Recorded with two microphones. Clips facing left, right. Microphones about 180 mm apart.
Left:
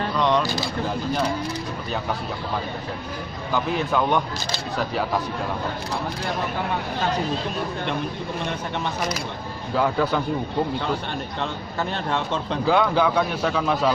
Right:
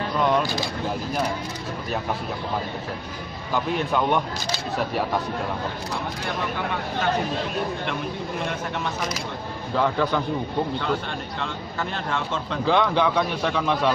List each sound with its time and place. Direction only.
0.2 s vehicle: 5° right (ahead or behind)
3.5 s speech: centre (ahead or behind)
9.8 s a man's voice: 5° left (ahead or behind)
11.8 s speech: 35° left (ahead or behind)
12.6 s speech: 5° left (ahead or behind)